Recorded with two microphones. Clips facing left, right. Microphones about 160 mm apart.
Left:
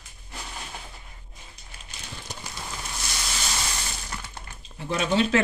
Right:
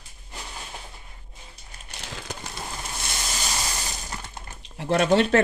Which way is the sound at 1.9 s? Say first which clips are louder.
Right 4 dB; 90° right.